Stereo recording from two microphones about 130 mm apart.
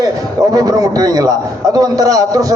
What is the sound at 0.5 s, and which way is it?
A man's voice, 30° right (ahead or behind).